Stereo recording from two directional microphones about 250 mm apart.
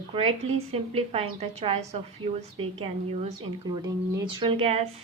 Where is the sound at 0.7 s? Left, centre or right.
Right.